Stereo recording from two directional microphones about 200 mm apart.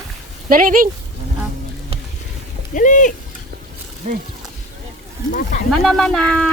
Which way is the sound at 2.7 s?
40° left (ahead or behind).